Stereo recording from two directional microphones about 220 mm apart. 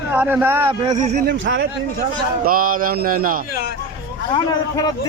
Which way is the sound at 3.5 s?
45° left (ahead or behind).